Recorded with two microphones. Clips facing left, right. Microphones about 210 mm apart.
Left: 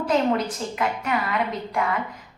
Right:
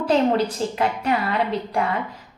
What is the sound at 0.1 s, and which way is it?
A woman's voice, 30° right (ahead or behind).